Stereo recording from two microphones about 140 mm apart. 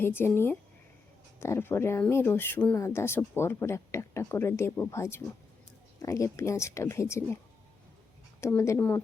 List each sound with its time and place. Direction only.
0.0 s speech: 15° left (ahead or behind)
8.4 s speech: 20° left (ahead or behind)